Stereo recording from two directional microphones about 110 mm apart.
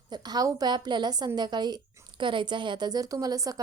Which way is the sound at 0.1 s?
40° right (ahead or behind).